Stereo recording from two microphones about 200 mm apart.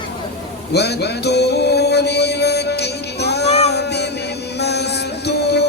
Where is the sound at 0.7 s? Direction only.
55° left (ahead or behind).